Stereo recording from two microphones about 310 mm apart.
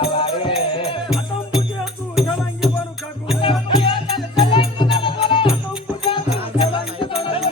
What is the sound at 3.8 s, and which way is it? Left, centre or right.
Music, centre.